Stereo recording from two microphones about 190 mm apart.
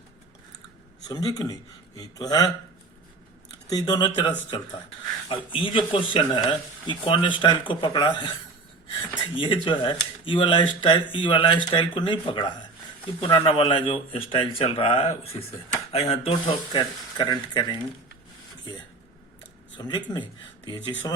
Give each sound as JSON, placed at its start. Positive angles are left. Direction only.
{"t": 1.0, "sound": "speech", "side_deg": 20}
{"t": 3.7, "sound": "speech", "side_deg": 20}
{"t": 9.3, "sound": "speech", "side_deg": 25}
{"t": 19.7, "sound": "speech", "side_deg": 25}